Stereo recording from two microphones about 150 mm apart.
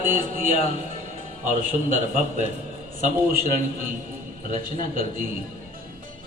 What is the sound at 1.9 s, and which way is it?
A man's voice, 60° right (ahead or behind).